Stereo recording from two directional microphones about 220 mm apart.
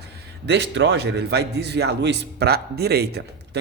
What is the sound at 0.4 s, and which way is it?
A man's voice, 50° right (ahead or behind).